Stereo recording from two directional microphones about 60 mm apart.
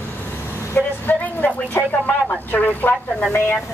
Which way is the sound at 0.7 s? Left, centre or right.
Left.